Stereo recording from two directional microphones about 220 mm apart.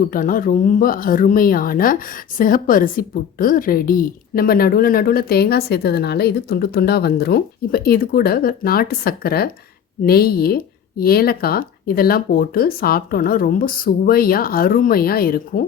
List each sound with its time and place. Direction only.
0.1 s speech: 40° left (ahead or behind)